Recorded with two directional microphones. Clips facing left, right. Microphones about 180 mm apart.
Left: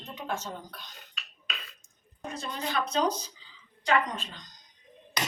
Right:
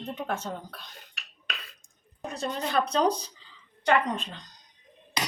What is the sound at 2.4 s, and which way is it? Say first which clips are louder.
Speech: right 5 dB; 35° right (ahead or behind).